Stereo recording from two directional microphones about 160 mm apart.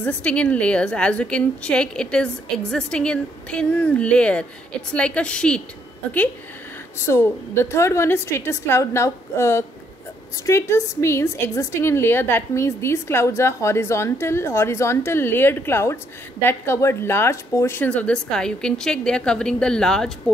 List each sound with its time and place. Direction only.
0.0 s a woman's voice: 10° left (ahead or behind)
7.1 s a woman's voice: 15° left (ahead or behind)